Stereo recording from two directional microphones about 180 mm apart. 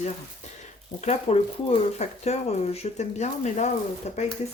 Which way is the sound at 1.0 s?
35° left (ahead or behind).